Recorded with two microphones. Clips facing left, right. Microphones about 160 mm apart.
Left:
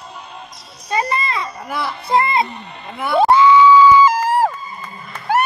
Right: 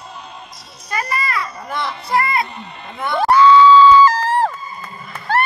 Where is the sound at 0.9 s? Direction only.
25° left (ahead or behind).